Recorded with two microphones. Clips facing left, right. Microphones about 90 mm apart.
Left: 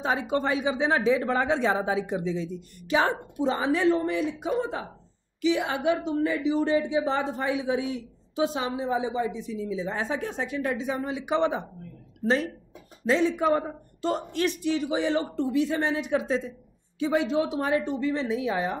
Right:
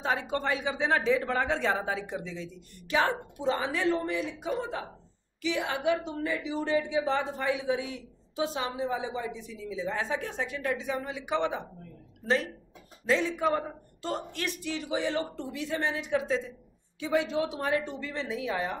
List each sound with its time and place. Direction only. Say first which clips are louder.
0.0 s a man's voice: left 4 dB; 15° left (ahead or behind)
12.2 s speech: left 3 dB; centre (ahead or behind)
13.0 s a man's voice: left 4 dB; 20° left (ahead or behind)